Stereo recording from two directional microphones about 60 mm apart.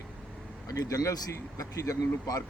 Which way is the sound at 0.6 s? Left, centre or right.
Left.